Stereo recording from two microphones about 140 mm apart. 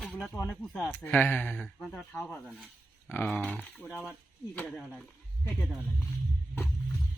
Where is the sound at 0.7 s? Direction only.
10° left (ahead or behind).